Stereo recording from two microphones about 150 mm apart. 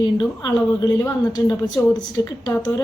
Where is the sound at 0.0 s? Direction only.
30° left (ahead or behind).